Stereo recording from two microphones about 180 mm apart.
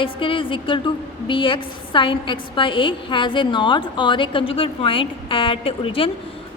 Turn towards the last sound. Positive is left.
turn(degrees=30)  # may be behind; listen again after turning